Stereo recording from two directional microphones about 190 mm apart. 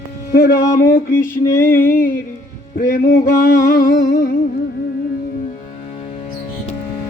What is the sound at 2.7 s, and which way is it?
Music, 55° left (ahead or behind).